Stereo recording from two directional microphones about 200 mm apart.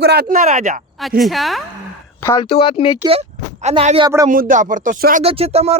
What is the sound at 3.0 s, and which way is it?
Speech, 30° right (ahead or behind).